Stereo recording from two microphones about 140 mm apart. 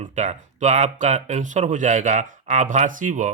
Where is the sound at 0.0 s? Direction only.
55° right (ahead or behind).